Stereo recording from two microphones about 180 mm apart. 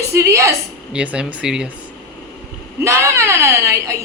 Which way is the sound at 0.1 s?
15° right (ahead or behind).